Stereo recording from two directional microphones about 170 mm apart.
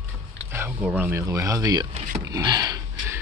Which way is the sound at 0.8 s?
5° right (ahead or behind).